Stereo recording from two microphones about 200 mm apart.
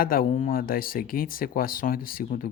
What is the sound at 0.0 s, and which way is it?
Speech, 45° left (ahead or behind).